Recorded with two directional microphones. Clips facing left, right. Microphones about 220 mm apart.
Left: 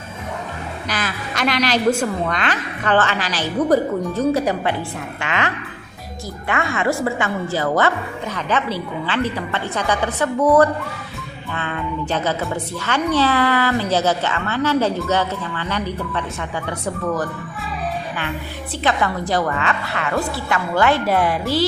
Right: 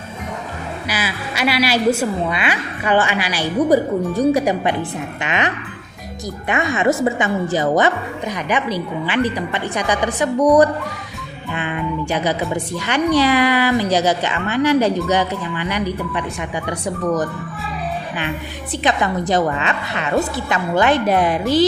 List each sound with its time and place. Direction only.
0.9 s a woman's voice: 10° right (ahead or behind)
6.5 s a woman's voice: 20° right (ahead or behind)
18.8 s a woman's voice: 20° right (ahead or behind)